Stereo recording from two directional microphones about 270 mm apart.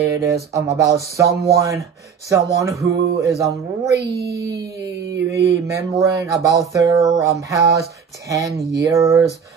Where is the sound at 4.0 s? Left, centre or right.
Right.